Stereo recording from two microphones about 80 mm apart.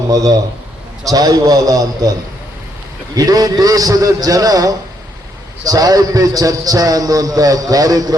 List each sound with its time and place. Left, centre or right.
0.1 s a man's voice: right
3.2 s a man's voice: right